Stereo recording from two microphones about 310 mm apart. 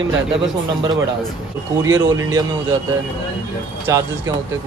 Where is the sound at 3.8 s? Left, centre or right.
Centre.